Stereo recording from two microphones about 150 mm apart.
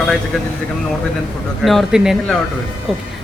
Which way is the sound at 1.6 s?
Centre (ahead or behind).